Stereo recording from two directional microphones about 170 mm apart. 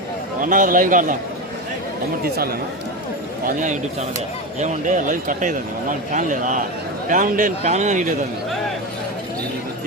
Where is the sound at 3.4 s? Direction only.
45° right (ahead or behind).